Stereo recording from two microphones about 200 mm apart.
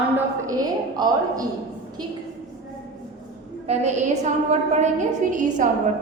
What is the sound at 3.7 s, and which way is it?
A woman's voice, 30° right (ahead or behind).